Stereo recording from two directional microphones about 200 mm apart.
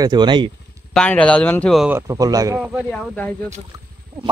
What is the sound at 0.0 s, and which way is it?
Speech, 20° right (ahead or behind).